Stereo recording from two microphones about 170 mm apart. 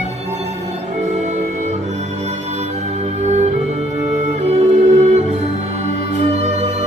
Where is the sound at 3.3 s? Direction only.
40° right (ahead or behind).